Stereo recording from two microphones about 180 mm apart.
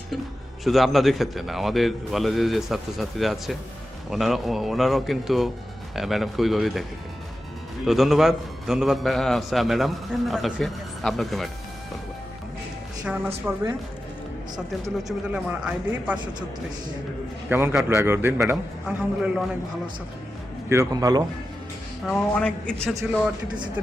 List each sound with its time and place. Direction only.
0.6 s a man's voice: centre (ahead or behind)
7.9 s a man's voice: centre (ahead or behind)
13.5 s speech: 10° right (ahead or behind)
14.9 s speech: 5° right (ahead or behind)
17.5 s speech: 10° right (ahead or behind)
20.7 s a man's voice: 20° right (ahead or behind)
22.0 s a man's voice: 5° left (ahead or behind)